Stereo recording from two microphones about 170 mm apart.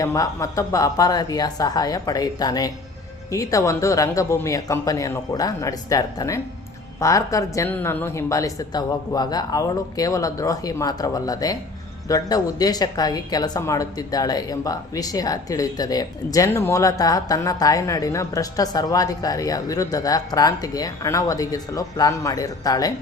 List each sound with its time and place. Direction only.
0.0 s a woman's voice: 20° left (ahead or behind)